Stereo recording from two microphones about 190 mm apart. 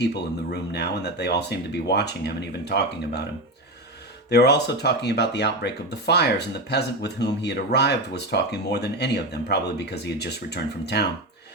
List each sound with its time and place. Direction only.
0.5 s speech: 60° left (ahead or behind)
4.3 s speech: 60° left (ahead or behind)